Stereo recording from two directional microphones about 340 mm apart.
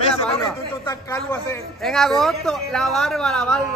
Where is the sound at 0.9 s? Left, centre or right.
Centre.